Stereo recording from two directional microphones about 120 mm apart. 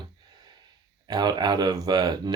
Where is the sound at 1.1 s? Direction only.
35° right (ahead or behind).